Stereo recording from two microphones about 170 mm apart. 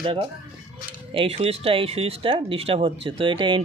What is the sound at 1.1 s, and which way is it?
Speech, 30° right (ahead or behind).